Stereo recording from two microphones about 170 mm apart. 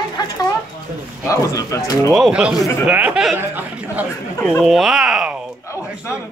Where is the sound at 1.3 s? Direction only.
20° left (ahead or behind).